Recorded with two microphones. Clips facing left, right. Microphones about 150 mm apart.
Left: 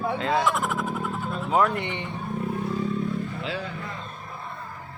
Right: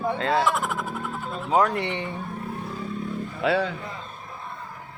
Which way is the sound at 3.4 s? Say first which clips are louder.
Right 9 dB; 75° right (ahead or behind).